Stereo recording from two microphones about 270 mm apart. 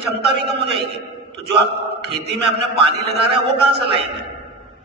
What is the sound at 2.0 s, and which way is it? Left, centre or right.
Mantra, right.